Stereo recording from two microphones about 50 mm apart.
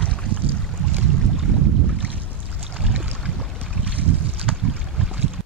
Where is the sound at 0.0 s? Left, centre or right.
Left.